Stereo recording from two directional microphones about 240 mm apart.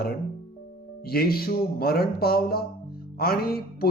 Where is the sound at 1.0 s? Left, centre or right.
Left.